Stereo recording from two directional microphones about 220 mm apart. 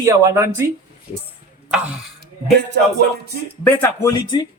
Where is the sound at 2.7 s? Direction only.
50° right (ahead or behind).